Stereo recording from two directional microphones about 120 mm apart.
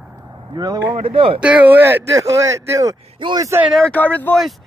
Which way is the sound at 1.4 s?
10° right (ahead or behind).